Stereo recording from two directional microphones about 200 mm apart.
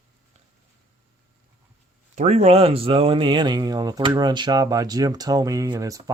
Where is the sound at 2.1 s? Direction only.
35° right (ahead or behind); by 6.1 s 15° right (ahead or behind).